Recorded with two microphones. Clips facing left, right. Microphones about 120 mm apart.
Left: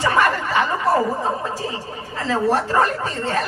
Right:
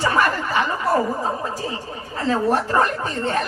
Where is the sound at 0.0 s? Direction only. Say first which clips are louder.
Left 1 dB; 35° right (ahead or behind).